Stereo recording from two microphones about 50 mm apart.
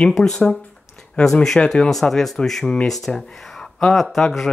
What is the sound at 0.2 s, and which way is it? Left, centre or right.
Speech, centre.